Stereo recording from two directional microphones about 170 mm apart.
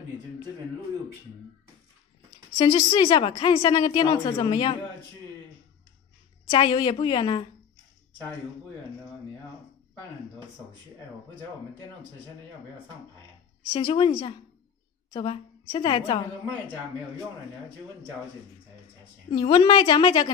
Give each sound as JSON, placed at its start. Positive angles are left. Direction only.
{"t": 2.5, "sound": "a woman's voice", "side_deg": 30}
{"t": 6.5, "sound": "a woman's voice", "side_deg": 30}
{"t": 13.7, "sound": "a woman's voice", "side_deg": 35}
{"t": 19.3, "sound": "a woman's voice", "side_deg": 30}